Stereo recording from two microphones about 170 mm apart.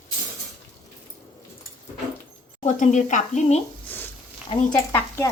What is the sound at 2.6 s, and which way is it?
Speech, 45° left (ahead or behind).